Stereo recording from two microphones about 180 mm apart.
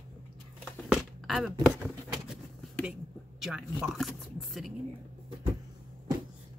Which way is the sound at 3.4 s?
5° right (ahead or behind).